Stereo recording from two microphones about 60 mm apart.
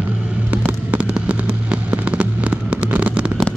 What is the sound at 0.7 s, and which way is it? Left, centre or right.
Fireworks, right.